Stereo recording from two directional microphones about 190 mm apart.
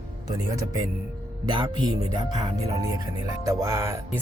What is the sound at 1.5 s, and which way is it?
Speech, 25° right (ahead or behind).